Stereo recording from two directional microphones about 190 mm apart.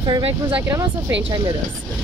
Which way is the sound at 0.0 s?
25° right (ahead or behind).